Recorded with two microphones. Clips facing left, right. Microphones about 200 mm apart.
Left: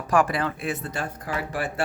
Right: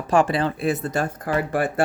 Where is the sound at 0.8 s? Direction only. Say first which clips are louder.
Right 7 dB; 45° right (ahead or behind).